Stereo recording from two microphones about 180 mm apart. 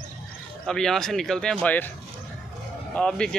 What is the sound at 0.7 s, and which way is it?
Speech, 5° left (ahead or behind).